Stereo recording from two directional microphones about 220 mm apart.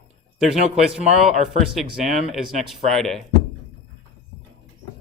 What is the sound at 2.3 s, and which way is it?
Speech, centre (ahead or behind).